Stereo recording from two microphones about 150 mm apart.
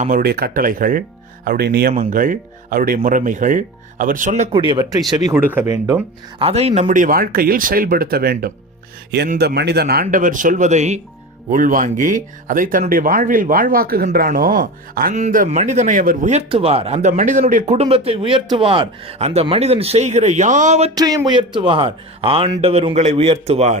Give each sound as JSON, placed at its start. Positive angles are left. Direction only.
{"t": 0.0, "sound": "speech", "side_deg": -80}
{"t": 1.5, "sound": "speech", "side_deg": -90}
{"t": 1.9, "sound": "speech", "side_deg": -60}
{"t": 4.7, "sound": "speech", "side_deg": -25}
{"t": 5.3, "sound": "speech", "side_deg": -10}
{"t": 6.4, "sound": "speech", "side_deg": -45}
{"t": 11.5, "sound": "speech", "side_deg": -65}
{"t": 15.1, "sound": "speech", "side_deg": -55}
{"t": 16.3, "sound": "speech", "side_deg": -40}
{"t": 20.9, "sound": "a man's voice", "side_deg": -25}